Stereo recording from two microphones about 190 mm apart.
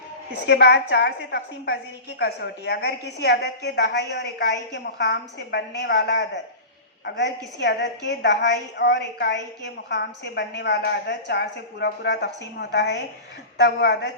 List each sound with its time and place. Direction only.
0.3 s a woman's voice: 60° left (ahead or behind)